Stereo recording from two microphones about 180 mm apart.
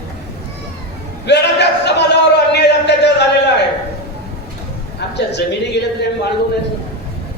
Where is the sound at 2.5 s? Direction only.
70° left (ahead or behind).